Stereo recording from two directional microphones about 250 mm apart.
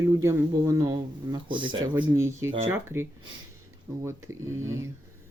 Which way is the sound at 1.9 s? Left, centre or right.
Centre.